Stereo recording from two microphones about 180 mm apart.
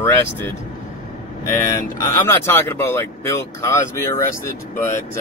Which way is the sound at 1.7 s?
15° left (ahead or behind).